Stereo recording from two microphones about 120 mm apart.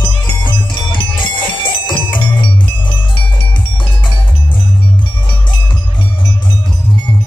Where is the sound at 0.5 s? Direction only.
45° left (ahead or behind).